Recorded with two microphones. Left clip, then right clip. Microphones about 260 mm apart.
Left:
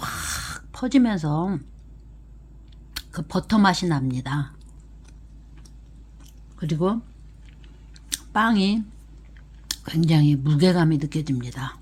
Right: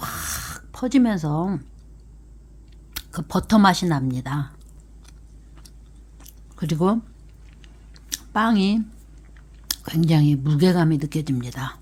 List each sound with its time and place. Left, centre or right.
0.0 s gasp: centre
2.9 s speech: centre
6.2 s zipper: centre
7.9 s a sound: centre
9.6 s speech: centre